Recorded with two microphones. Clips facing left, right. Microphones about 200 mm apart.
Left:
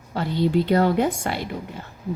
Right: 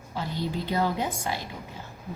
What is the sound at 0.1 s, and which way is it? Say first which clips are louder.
A woman's voice: left 10 dB; 70° left (ahead or behind).